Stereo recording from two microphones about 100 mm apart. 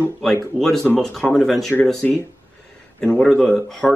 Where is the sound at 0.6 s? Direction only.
Centre (ahead or behind).